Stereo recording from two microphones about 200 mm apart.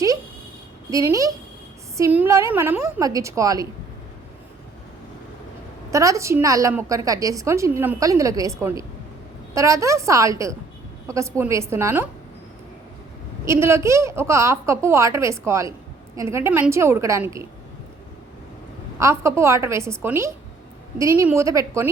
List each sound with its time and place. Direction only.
0.9 s a woman's voice: 15° right (ahead or behind)
5.9 s a woman's voice: 15° right (ahead or behind)
13.4 s a woman's voice: 15° right (ahead or behind)
18.9 s a woman's voice: 15° right (ahead or behind)